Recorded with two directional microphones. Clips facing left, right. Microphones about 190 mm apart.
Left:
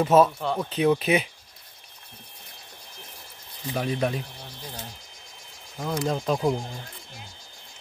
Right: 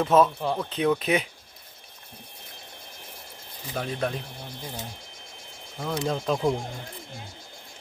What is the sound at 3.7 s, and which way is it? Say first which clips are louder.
Speech: left 3 dB; 10° left (ahead or behind).